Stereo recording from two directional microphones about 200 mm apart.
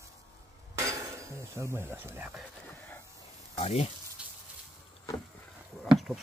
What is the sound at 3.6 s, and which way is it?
Speech, 30° left (ahead or behind).